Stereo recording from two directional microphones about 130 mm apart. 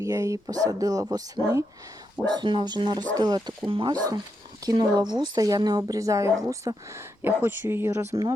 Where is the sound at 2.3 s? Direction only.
35° right (ahead or behind).